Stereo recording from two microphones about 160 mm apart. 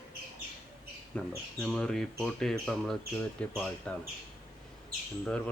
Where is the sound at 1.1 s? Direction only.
5° left (ahead or behind).